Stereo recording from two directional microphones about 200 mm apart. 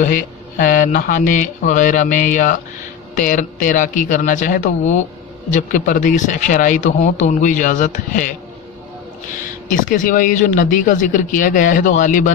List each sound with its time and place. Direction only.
0.0 s speech: 40° left (ahead or behind)
9.7 s speech: 40° left (ahead or behind)